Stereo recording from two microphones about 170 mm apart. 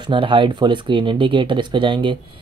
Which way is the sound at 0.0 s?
30° right (ahead or behind).